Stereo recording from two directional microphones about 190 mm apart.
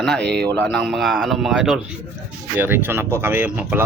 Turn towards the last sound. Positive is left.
turn(degrees=-10)  # may be behind; listen again after turning